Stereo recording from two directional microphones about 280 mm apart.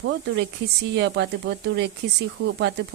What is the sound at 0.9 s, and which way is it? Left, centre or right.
Speech, right.